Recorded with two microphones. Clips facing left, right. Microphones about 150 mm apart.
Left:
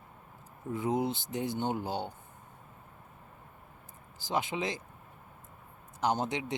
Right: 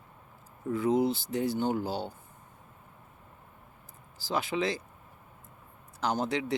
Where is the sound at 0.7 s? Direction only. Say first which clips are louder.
Right 4 dB; 20° left (ahead or behind).